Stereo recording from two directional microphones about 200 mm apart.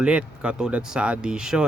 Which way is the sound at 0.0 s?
5° right (ahead or behind).